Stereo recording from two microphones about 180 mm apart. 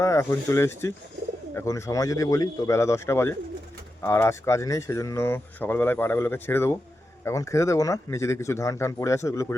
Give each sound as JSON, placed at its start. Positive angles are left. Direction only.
{"t": 0.0, "sound": "speech", "side_deg": 15}